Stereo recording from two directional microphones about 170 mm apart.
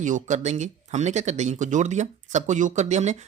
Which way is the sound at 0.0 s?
45° right (ahead or behind).